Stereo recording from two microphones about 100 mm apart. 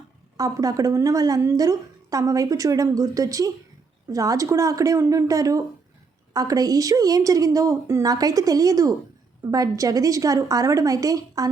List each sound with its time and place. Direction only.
0.3 s a woman's voice: 35° right (ahead or behind)
8.0 s a woman's voice: 40° right (ahead or behind)